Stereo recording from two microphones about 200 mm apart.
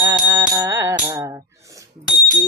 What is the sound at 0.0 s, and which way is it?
Music, 15° right (ahead or behind).